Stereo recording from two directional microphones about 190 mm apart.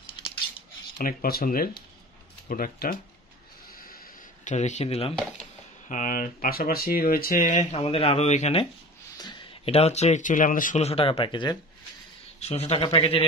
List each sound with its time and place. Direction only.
0.9 s speech: 50° left (ahead or behind)
3.8 s a sound: 50° left (ahead or behind)
4.6 s speech: 35° left (ahead or behind)
5.9 s speech: 45° left (ahead or behind)